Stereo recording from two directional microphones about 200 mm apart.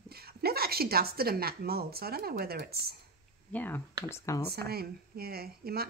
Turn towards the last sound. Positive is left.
turn(degrees=-50)  # may be behind; listen again after turning